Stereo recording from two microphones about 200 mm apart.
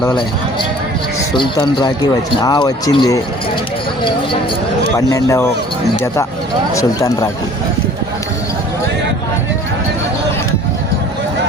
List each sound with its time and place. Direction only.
1.4 s speech: 20° left (ahead or behind)
4.9 s speech: 15° left (ahead or behind)
6.7 s speech: 15° left (ahead or behind)